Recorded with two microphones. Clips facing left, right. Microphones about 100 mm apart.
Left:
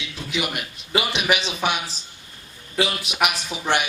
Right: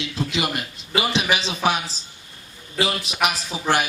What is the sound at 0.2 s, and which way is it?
A man's voice, 30° right (ahead or behind).